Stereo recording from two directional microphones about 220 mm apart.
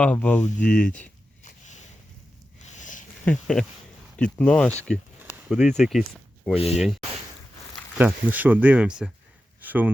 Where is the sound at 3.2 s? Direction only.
5° left (ahead or behind).